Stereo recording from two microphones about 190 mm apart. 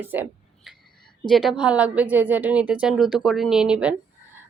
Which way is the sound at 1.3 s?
Centre (ahead or behind).